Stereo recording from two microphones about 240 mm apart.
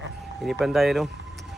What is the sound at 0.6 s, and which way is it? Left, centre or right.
Speech, centre.